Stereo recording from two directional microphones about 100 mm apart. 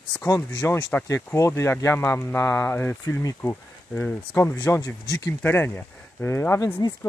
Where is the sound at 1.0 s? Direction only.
30° left (ahead or behind).